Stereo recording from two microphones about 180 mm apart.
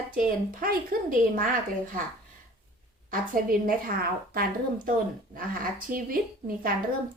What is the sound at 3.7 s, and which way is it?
Speech, 55° right (ahead or behind).